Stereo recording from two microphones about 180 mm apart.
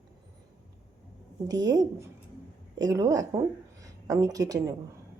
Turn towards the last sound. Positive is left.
turn(degrees=-20)  # may be behind; listen again after turning